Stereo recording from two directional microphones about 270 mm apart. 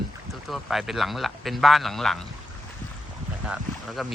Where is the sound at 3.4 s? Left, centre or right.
Centre.